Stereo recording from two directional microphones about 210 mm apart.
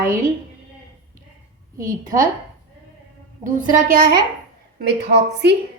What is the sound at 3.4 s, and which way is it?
Speech, 40° right (ahead or behind).